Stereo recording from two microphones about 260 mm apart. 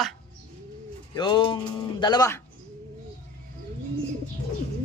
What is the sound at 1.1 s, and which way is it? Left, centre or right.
Speech, centre.